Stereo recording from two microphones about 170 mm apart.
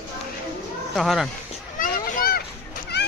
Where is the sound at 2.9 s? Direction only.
80° left.